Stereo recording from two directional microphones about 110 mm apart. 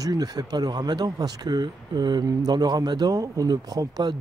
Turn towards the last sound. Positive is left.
turn(degrees=-35)  # may be behind; listen again after turning